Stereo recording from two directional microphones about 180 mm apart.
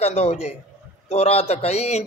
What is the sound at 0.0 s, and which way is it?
A man's voice, 35° left (ahead or behind).